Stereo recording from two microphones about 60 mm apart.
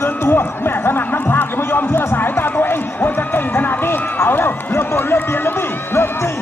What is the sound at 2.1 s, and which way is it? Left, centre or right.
Run, left.